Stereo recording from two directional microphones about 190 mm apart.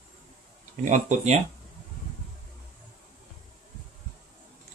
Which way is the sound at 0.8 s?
40° right (ahead or behind).